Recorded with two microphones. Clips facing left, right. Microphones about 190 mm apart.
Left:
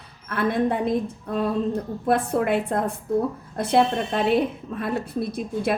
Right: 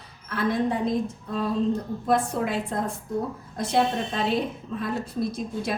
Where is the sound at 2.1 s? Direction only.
60° left (ahead or behind).